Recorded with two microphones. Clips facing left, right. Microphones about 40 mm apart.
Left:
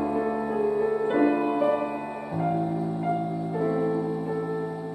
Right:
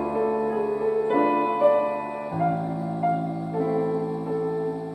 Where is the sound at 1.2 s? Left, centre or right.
Centre.